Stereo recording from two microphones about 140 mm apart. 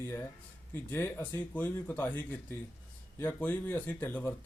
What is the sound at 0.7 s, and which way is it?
Speech, 15° left (ahead or behind).